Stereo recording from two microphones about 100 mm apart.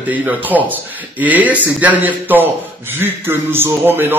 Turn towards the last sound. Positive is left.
turn(degrees=-20)  # may be behind; listen again after turning